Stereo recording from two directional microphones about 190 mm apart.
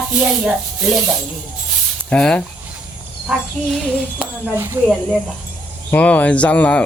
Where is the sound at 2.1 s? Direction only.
5° left (ahead or behind).